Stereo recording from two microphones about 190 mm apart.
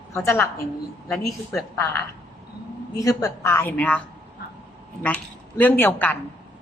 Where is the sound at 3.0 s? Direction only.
20° left (ahead or behind).